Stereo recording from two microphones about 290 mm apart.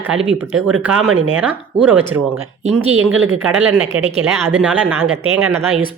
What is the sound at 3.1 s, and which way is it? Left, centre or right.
Speech, right.